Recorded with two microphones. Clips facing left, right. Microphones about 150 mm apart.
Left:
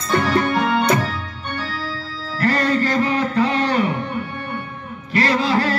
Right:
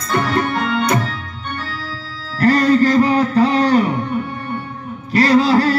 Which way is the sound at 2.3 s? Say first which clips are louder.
Right 6 dB; 40° right (ahead or behind).